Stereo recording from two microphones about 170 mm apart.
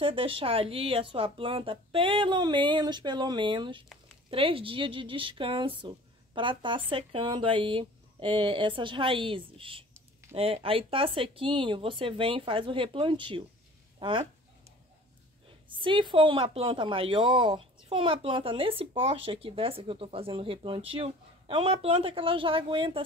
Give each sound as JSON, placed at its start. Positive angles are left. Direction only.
{"t": 0.0, "sound": "a woman's voice", "side_deg": -30}
{"t": 15.8, "sound": "a woman's voice", "side_deg": -30}